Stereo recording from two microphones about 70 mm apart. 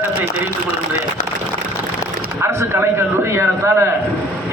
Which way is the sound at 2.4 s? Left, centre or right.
Right.